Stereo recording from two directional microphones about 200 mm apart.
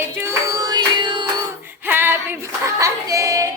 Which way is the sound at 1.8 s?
10° right (ahead or behind).